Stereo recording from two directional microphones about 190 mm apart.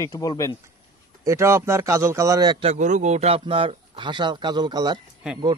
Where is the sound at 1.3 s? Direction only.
15° right (ahead or behind).